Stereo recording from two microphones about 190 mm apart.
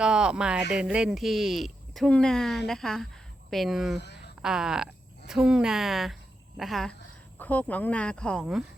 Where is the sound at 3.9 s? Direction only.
65° left (ahead or behind).